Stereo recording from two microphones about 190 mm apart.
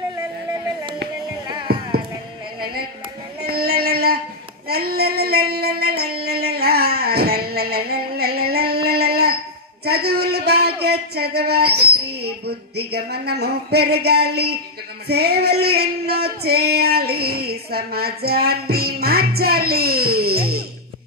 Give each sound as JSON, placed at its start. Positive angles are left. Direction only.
{"t": 1.7, "sound": "music", "side_deg": -55}
{"t": 3.4, "sound": "music", "side_deg": -55}
{"t": 4.6, "sound": "female singing", "side_deg": -55}
{"t": 9.8, "sound": "a sound", "side_deg": -55}